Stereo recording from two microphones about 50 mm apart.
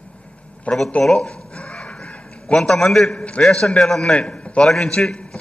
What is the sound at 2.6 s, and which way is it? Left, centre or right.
A man's voice, centre.